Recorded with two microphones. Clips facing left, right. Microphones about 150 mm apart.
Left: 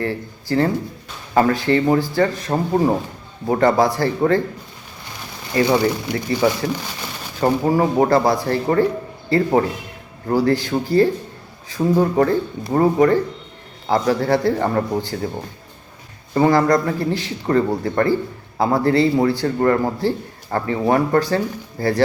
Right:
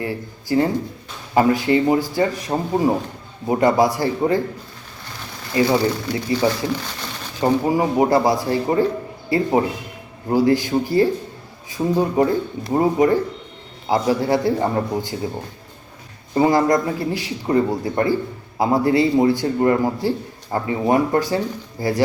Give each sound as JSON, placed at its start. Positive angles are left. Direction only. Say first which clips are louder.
{"t": 0.0, "sound": "a man's voice", "louder": "left 2 dB", "side_deg": -15}
{"t": 5.6, "sound": "speech", "louder": "left 1 dB", "side_deg": 15}
{"t": 7.7, "sound": "a man's voice", "louder": "left 3 dB", "side_deg": -15}
{"t": 16.3, "sound": "a man's voice", "louder": "left 1 dB", "side_deg": -15}